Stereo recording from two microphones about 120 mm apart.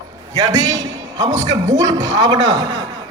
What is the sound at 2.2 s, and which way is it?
Speech, 30° right (ahead or behind).